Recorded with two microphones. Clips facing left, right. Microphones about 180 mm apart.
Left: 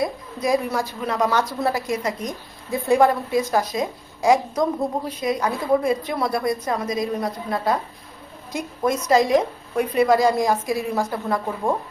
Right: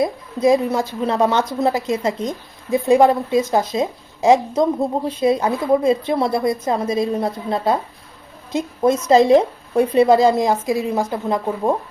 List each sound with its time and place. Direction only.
0.0 s a woman's voice: 25° right (ahead or behind)